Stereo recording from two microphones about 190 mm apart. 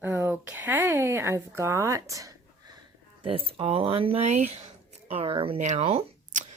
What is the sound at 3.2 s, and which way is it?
Speech, 30° right (ahead or behind).